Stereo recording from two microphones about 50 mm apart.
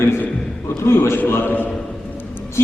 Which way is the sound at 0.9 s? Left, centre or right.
Left.